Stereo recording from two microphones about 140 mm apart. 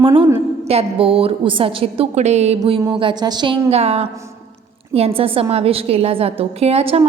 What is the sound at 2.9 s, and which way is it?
Speech, 35° right (ahead or behind).